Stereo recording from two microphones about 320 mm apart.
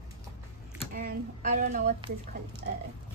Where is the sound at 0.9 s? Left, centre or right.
Right.